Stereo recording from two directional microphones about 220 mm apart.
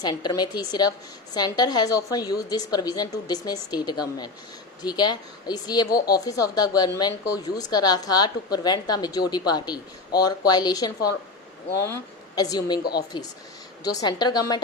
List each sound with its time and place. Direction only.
0.0 s a woman's voice: 20° left (ahead or behind)
12.8 s speech: 45° left (ahead or behind)
14.0 s a woman's voice: 20° left (ahead or behind)